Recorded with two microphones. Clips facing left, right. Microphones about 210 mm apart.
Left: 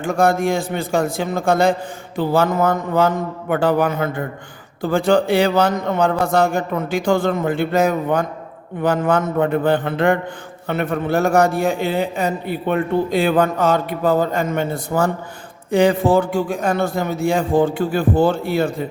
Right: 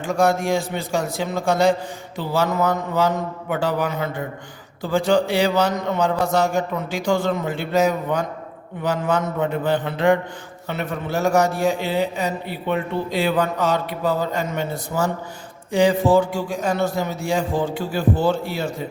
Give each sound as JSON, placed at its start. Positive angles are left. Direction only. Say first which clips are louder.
{"t": 0.0, "sound": "a man's voice", "louder": "left 3 dB", "side_deg": 55}